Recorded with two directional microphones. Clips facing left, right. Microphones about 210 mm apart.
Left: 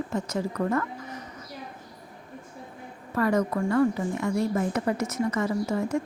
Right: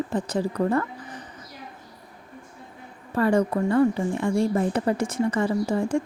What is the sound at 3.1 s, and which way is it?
Speech, 30° right (ahead or behind).